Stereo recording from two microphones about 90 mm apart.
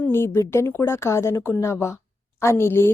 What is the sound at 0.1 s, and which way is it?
Speech, 30° left (ahead or behind).